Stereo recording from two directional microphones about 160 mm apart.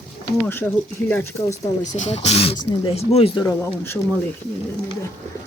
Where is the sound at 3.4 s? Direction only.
15° left (ahead or behind).